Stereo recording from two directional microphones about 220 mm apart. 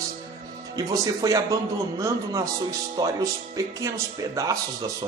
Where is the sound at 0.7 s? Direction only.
15° right (ahead or behind).